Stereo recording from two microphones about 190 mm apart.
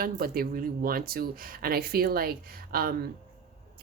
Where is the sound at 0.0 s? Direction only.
50° right (ahead or behind).